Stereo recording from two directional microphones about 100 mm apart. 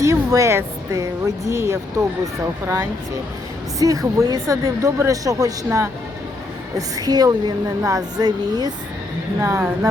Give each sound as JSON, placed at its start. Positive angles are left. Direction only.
{"t": 0.0, "sound": "speech", "side_deg": -35}
{"t": 3.8, "sound": "speech", "side_deg": -35}